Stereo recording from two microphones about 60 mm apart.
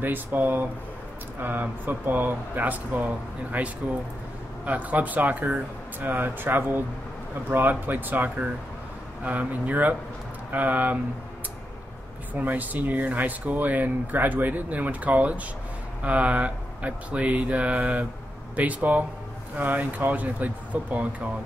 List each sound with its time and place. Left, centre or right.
0.0 s speech: right
12.4 s speech: right